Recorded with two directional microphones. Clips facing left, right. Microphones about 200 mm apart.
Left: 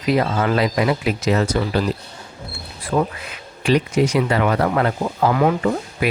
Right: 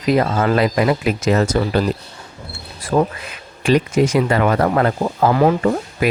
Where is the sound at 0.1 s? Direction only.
45° right (ahead or behind).